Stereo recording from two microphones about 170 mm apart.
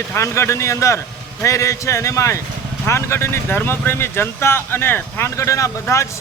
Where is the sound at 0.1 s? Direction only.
15° left (ahead or behind).